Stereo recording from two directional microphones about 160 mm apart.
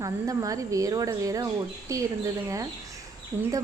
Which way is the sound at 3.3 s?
20° right (ahead or behind).